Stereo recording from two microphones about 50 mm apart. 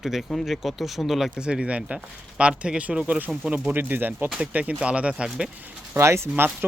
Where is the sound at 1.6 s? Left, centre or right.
Right.